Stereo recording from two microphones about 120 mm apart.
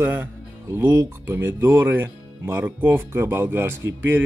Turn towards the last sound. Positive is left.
turn(degrees=-15)  # may be behind; listen again after turning